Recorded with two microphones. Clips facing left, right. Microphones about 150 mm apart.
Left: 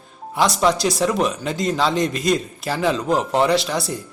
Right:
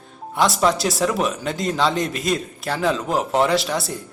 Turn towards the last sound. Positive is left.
turn(degrees=0)  # may be behind; listen again after turning